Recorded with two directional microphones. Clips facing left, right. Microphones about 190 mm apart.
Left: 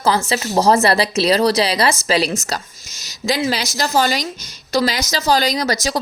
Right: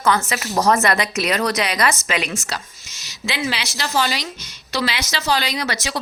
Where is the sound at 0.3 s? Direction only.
30° left (ahead or behind).